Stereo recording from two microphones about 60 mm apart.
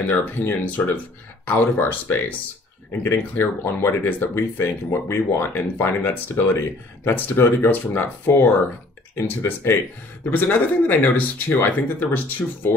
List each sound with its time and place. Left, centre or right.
0.1 s speech: left
10.3 s speech: left